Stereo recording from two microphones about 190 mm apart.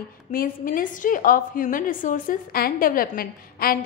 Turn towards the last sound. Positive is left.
turn(degrees=50)  # may be behind; listen again after turning